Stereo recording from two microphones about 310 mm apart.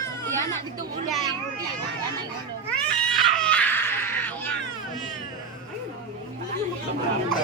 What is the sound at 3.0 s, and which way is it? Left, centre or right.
Baby cry, centre.